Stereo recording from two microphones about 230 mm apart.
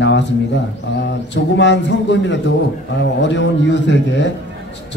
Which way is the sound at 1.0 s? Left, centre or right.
Left.